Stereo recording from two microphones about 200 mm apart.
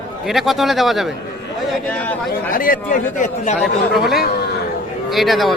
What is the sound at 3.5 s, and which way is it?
A man's voice, centre (ahead or behind).